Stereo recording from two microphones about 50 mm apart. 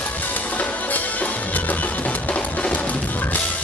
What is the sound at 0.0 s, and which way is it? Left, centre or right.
Music, left.